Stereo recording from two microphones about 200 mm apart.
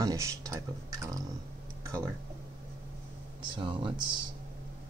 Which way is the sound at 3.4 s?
25° right (ahead or behind).